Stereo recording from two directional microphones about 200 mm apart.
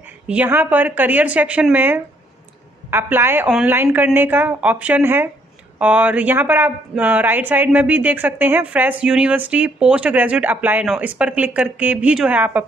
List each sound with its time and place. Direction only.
0.3 s speech: 10° right (ahead or behind)